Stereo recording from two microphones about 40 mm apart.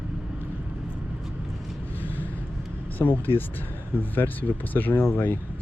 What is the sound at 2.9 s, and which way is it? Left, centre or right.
Speech, left.